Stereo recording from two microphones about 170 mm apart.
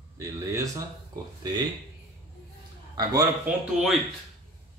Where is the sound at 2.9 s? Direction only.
25° right (ahead or behind).